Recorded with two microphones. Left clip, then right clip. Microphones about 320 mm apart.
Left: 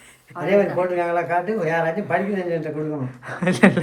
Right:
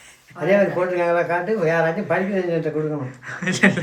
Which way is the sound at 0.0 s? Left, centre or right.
Centre.